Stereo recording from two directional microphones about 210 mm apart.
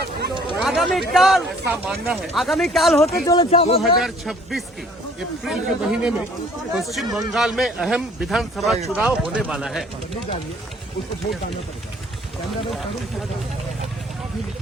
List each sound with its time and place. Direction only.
0.6 s speech: centre (ahead or behind)
3.2 s speech: 25° left (ahead or behind)
4.0 s speech: centre (ahead or behind)